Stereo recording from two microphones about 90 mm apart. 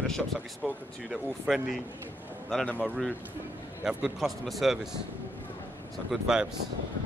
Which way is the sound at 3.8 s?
5° right (ahead or behind).